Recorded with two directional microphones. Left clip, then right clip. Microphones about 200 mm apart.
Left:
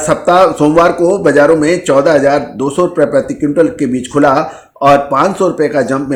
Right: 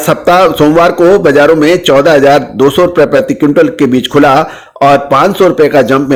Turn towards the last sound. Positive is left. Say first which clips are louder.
# right 6 dB
turn(degrees=-35)  # may be behind; listen again after turning